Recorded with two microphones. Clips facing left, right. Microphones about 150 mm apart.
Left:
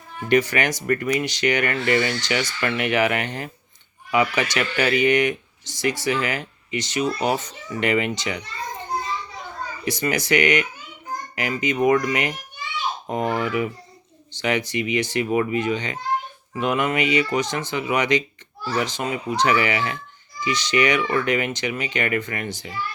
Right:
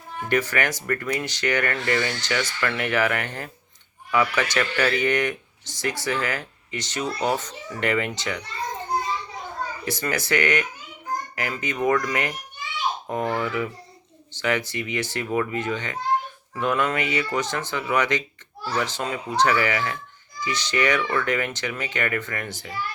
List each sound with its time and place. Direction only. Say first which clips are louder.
0.3 s speech: left 4 dB; 15° left (ahead or behind)
9.8 s a child's voice: left 5 dB; 15° left (ahead or behind)